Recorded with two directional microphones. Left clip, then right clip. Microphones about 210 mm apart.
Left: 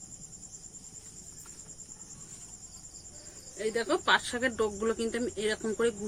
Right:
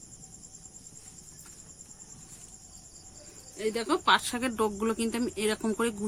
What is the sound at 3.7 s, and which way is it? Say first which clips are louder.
Speech: right 2 dB; 45° right (ahead or behind).